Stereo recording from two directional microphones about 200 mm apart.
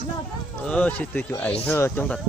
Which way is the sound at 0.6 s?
5° left (ahead or behind).